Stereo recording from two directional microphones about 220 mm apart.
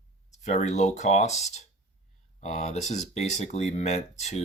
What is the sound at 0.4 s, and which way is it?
Speech, 30° left (ahead or behind).